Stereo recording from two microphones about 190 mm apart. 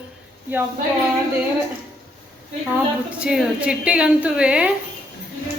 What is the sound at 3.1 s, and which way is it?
A woman's voice, 5° right (ahead or behind).